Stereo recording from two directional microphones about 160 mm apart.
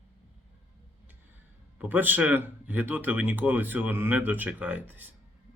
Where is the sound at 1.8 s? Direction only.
10° right (ahead or behind).